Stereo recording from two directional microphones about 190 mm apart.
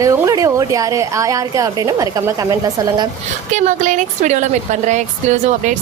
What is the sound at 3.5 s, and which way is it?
A woman's voice, 40° right (ahead or behind).